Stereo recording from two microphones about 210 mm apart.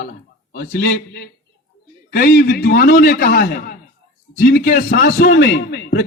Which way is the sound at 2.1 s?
45° left (ahead or behind).